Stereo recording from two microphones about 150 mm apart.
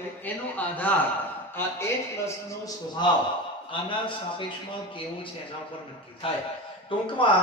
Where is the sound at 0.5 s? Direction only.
10° left (ahead or behind).